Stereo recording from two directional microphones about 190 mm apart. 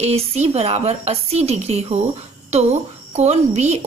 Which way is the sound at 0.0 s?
35° right (ahead or behind).